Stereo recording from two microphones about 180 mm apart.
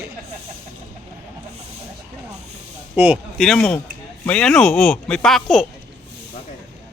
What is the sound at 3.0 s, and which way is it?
Speech, 10° right (ahead or behind).